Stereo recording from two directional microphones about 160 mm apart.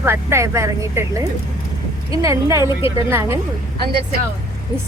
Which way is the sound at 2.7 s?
35° left (ahead or behind).